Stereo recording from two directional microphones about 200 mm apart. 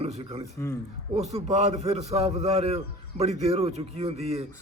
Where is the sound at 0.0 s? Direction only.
30° right (ahead or behind).